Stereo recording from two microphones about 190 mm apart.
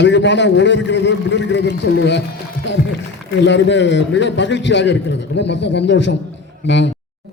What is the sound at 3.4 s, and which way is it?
A man's voice, 70° left (ahead or behind).